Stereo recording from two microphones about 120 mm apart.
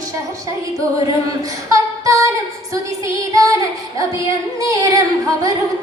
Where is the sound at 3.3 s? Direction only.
30° right (ahead or behind).